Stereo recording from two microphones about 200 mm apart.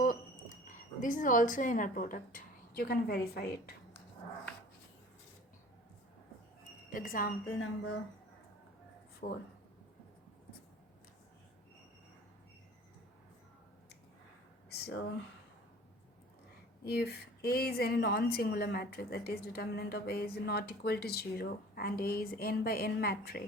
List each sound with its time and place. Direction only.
0.0 s speech: 40° left (ahead or behind)
6.9 s a woman's voice: 45° left (ahead or behind)
9.2 s a woman's voice: 45° left (ahead or behind)
14.7 s a sound: 55° left (ahead or behind)
16.8 s a woman's voice: 50° left (ahead or behind)